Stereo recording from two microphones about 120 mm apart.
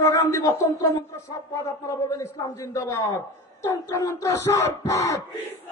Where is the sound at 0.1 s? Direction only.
25° left (ahead or behind).